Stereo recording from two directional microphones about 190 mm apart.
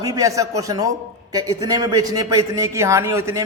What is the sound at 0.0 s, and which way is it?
A man's voice, 15° right (ahead or behind).